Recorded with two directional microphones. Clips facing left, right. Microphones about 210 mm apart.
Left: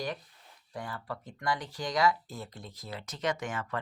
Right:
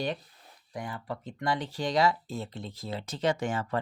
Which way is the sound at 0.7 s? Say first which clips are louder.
Right 2 dB; 15° right (ahead or behind).